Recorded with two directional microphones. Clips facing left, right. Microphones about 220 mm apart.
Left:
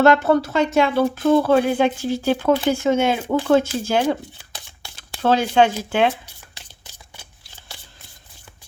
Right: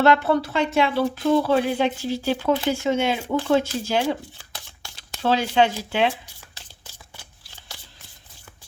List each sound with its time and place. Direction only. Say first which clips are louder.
0.0 s speech: left 3 dB; 45° left (ahead or behind)
5.2 s speech: left 3 dB; 50° left (ahead or behind)